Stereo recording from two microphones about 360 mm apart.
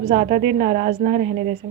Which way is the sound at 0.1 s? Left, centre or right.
Centre.